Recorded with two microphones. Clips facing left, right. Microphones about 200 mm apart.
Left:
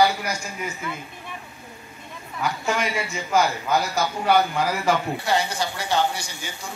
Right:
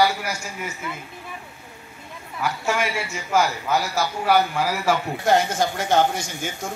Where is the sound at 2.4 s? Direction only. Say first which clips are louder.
Right 1 dB; 5° right (ahead or behind).